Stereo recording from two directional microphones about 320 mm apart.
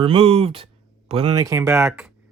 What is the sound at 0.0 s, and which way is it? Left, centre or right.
Speech, centre.